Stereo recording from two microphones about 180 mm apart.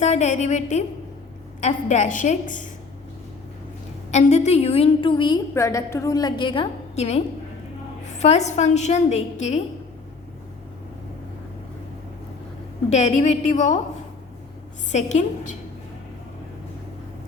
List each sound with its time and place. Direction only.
0.0 s a woman's voice: 40° left (ahead or behind)
4.1 s a woman's voice: 40° left (ahead or behind)
5.5 s a woman's voice: 15° left (ahead or behind); by 7.2 s 35° left (ahead or behind)
8.2 s a woman's voice: 40° left (ahead or behind)
12.9 s a woman's voice: 40° left (ahead or behind)
14.9 s a woman's voice: 40° left (ahead or behind)